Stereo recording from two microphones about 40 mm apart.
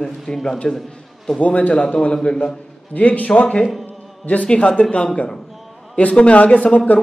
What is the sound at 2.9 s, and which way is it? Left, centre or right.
A man's voice, left.